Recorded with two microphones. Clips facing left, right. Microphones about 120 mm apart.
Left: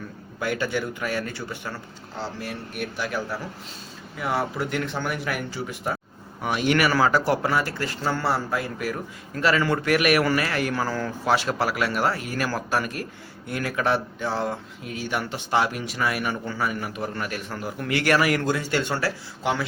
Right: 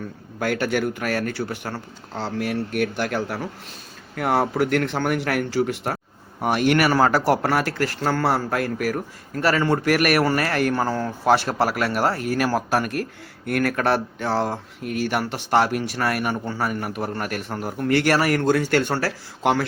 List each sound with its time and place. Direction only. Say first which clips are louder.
0.3 s speech: right 4 dB; 65° right (ahead or behind)
4.1 s speech: right 5 dB; 60° right (ahead or behind)
6.4 s speech: right 3 dB; 55° right (ahead or behind)
9.4 s a man's voice: right 2 dB; 35° right (ahead or behind)
9.8 s a man's voice: even; 50° right (ahead or behind)
10.8 s a man's voice: right 3 dB; 30° right (ahead or behind)
11.6 s a man's voice: right 3 dB; 50° right (ahead or behind)
14.3 s a man's voice: right 4 dB; 40° right (ahead or behind)
14.8 s a man's voice: right 5 dB; 65° right (ahead or behind); by 18.5 s 40° right (ahead or behind)
18.5 s a man's voice: right 5 dB; 55° right (ahead or behind)